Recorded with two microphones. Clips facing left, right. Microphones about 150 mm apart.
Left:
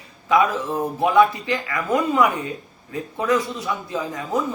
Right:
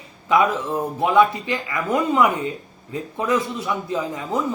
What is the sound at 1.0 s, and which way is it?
Speech, 20° right (ahead or behind).